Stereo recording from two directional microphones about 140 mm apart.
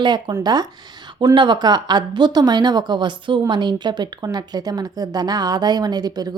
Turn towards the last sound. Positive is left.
turn(degrees=-30)  # may be behind; listen again after turning